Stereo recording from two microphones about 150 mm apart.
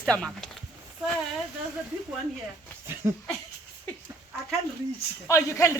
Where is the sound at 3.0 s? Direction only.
20° right (ahead or behind).